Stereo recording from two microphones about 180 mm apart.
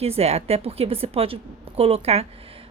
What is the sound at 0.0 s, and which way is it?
Speech, 35° right (ahead or behind).